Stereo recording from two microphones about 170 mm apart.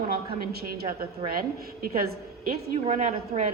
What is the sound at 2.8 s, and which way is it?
Speech, 40° right (ahead or behind).